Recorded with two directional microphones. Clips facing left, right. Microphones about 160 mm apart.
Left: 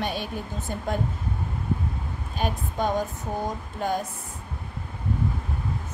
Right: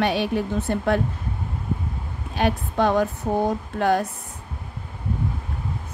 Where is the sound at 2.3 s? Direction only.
75° right (ahead or behind).